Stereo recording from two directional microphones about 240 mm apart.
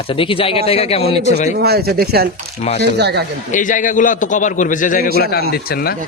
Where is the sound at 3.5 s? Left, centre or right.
Left.